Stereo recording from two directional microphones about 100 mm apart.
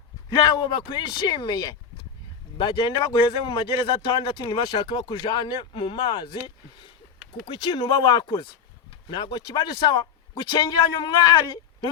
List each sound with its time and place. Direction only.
0.3 s a man's voice: 50° left (ahead or behind)
7.4 s a man's voice: 60° left (ahead or behind)